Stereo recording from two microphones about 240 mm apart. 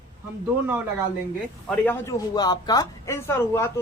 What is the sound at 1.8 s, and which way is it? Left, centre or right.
A man's voice, centre.